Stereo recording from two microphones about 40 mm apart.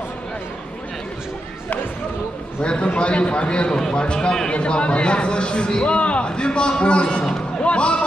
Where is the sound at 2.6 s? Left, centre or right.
Left.